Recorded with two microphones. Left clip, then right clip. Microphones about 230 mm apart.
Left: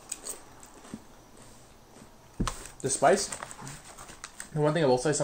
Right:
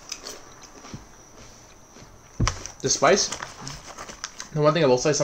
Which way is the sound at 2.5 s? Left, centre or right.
Centre.